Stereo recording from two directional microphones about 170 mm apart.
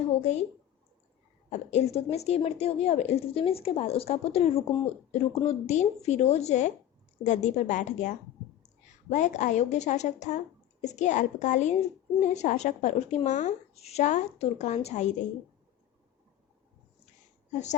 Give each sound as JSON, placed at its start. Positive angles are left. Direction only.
{"t": 0.2, "sound": "a woman's voice", "side_deg": 40}
{"t": 1.5, "sound": "a woman's voice", "side_deg": 40}
{"t": 17.5, "sound": "a woman's voice", "side_deg": 45}